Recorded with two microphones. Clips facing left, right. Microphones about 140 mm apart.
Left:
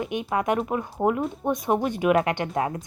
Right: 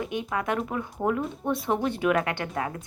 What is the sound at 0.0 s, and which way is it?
Speech, 20° left (ahead or behind).